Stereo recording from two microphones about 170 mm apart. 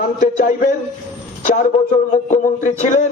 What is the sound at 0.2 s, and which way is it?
Speech, 50° left (ahead or behind).